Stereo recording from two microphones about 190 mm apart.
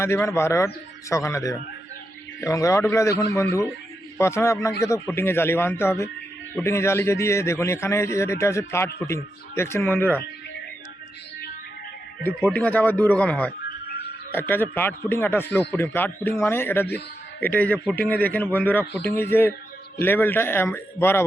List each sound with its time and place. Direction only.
0.0 s speech: 15° left (ahead or behind)
12.2 s speech: 10° left (ahead or behind)